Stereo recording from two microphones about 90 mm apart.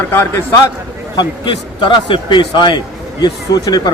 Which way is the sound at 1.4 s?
60° left (ahead or behind).